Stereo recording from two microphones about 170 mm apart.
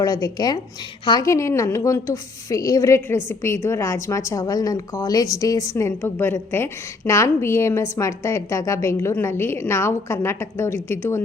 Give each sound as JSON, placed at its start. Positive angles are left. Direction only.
{"t": 0.0, "sound": "a woman's voice", "side_deg": 20}